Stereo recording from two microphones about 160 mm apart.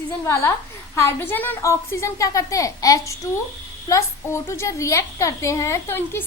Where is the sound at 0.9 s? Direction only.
15° left (ahead or behind).